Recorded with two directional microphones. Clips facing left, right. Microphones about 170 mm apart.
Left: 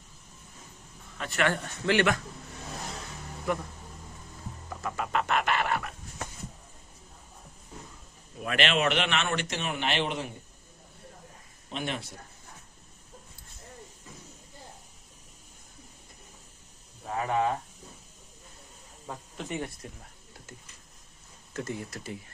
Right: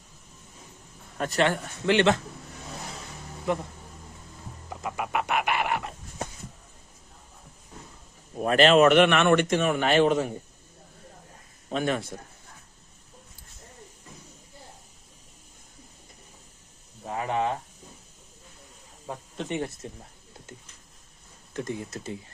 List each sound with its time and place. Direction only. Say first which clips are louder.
1.5 s a man's voice: right 3 dB; 20° right (ahead or behind)
3.5 s a man's voice: right 3 dB; 20° right (ahead or behind)
4.8 s music: right 1 dB; 15° right (ahead or behind)
8.4 s a man's voice: right 10 dB; 40° right (ahead or behind)
11.8 s a man's voice: right 7 dB; 45° right (ahead or behind)
17.1 s a sound: even; 25° right (ahead or behind)
19.0 s snake: right 4 dB; 20° right (ahead or behind)
19.8 s a man's voice: right 4 dB; 25° right (ahead or behind)
21.5 s a man's voice: right 3 dB; 20° right (ahead or behind)